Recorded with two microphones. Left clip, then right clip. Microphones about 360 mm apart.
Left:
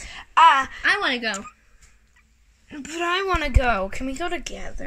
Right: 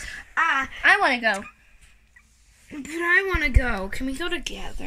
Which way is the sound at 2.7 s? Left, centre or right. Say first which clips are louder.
Right 2 dB; centre.